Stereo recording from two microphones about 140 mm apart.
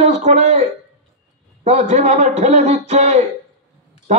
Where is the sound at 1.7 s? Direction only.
55° right (ahead or behind).